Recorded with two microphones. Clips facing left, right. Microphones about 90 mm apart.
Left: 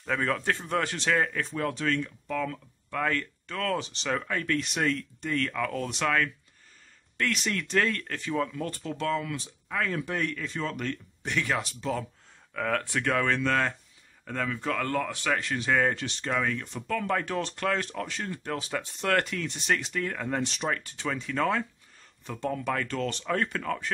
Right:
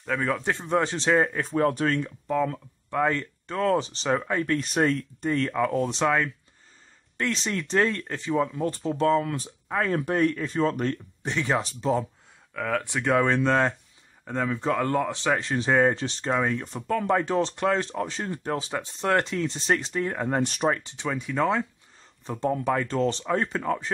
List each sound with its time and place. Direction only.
0.0 s speech: 5° right (ahead or behind)
0.4 s speech: 20° right (ahead or behind)
1.5 s speech: 40° right (ahead or behind)
4.6 s speech: 35° right (ahead or behind)
12.5 s speech: 5° right (ahead or behind)
12.8 s speech: 20° right (ahead or behind)
20.4 s speech: 45° right (ahead or behind)
20.7 s speech: 20° right (ahead or behind)
22.2 s speech: 30° right (ahead or behind)